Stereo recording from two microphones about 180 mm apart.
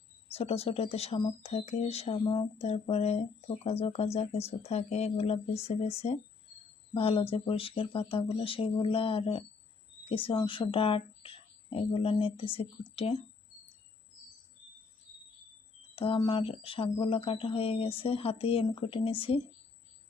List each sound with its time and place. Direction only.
0.3 s speech: 35° left (ahead or behind)
16.0 s speech: 30° left (ahead or behind)